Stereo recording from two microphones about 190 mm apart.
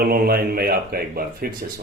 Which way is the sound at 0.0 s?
50° right (ahead or behind).